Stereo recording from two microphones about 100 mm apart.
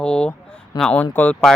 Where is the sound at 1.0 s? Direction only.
15° left (ahead or behind).